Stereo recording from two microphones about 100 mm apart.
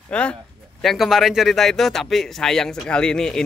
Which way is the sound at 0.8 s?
Centre (ahead or behind).